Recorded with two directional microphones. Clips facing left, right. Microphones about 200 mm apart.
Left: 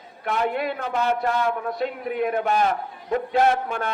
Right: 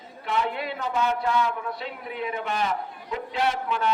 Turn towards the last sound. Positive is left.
turn(degrees=50)  # may be behind; listen again after turning